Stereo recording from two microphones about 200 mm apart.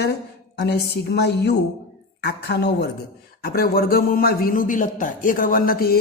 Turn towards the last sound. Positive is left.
turn(degrees=50)  # may be behind; listen again after turning